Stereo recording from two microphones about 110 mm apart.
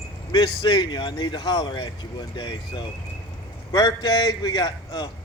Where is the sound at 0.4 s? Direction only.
45° left (ahead or behind).